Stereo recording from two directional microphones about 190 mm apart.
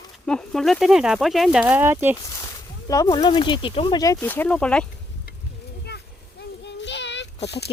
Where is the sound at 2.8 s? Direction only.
20° left (ahead or behind).